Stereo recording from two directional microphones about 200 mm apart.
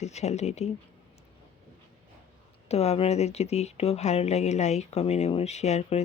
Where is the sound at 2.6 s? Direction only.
30° left (ahead or behind).